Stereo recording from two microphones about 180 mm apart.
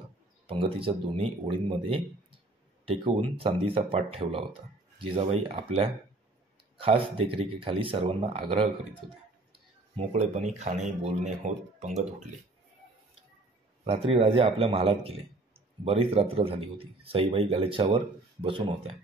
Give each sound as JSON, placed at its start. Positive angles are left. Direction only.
{"t": 0.5, "sound": "speech", "side_deg": -30}
{"t": 13.8, "sound": "speech", "side_deg": -30}